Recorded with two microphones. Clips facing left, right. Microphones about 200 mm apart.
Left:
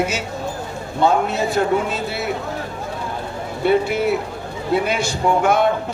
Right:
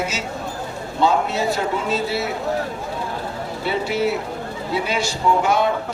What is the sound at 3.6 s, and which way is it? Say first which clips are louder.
A man's voice: left 4 dB; 55° left (ahead or behind).